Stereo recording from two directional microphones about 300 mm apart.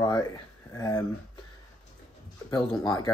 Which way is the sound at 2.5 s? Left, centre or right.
Centre.